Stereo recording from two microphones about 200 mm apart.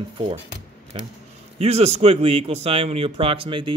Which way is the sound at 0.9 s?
30° right (ahead or behind).